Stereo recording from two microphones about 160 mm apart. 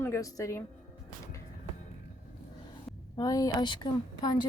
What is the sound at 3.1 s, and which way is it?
Speech, 25° left (ahead or behind).